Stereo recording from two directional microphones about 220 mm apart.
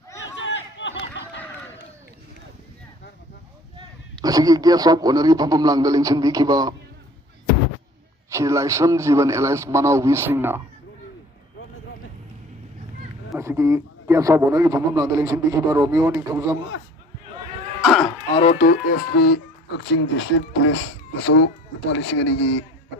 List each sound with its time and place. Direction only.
0.3 s a sound: 55° left (ahead or behind)
3.8 s a man's voice: 15° right (ahead or behind)
8.3 s a man's voice: 15° right (ahead or behind)
13.4 s a man's voice: 15° right (ahead or behind)
17.8 s a sound: centre (ahead or behind)
18.3 s speech: 25° left (ahead or behind); by 22.6 s 55° left (ahead or behind)